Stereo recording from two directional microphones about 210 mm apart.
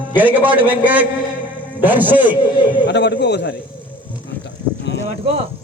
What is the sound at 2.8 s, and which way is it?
Speech, 55° left (ahead or behind).